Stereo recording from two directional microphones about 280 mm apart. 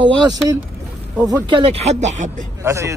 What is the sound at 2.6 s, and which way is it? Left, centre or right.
Speech, centre.